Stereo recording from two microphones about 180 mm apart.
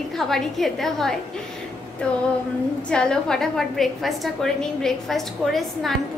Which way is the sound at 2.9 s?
5° left (ahead or behind).